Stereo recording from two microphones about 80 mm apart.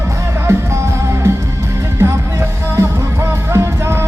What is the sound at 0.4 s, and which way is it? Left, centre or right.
Music, right.